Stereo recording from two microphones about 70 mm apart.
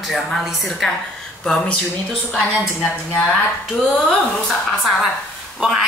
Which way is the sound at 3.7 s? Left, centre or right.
Centre.